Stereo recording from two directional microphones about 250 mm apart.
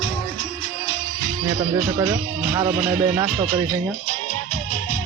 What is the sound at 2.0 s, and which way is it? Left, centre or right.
Speech, centre.